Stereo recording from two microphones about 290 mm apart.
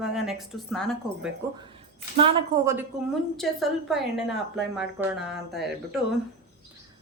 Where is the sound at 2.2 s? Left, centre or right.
Centre.